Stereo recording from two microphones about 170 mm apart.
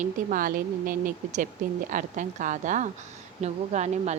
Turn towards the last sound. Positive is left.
turn(degrees=-40)  # may be behind; listen again after turning